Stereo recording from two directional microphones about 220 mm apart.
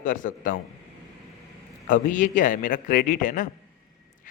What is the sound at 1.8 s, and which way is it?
A man's voice, 35° left (ahead or behind).